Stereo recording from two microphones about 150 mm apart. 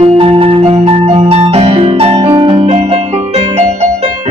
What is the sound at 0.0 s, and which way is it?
Music, 40° right (ahead or behind).